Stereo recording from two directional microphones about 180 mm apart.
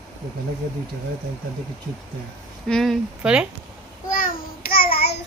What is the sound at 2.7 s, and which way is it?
Speech, centre (ahead or behind).